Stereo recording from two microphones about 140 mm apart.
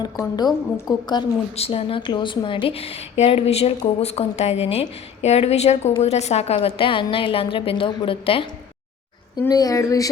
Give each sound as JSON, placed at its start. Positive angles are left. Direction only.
{"t": 0.2, "sound": "a woman's voice", "side_deg": 30}
{"t": 1.5, "sound": "a woman's voice", "side_deg": 45}
{"t": 6.6, "sound": "a woman's voice", "side_deg": 40}
{"t": 9.5, "sound": "a woman's voice", "side_deg": 25}